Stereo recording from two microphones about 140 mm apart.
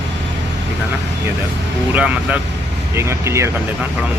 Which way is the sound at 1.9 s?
10° right (ahead or behind).